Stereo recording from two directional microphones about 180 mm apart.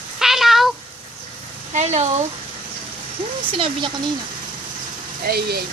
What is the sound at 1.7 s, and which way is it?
Speech, 40° right (ahead or behind).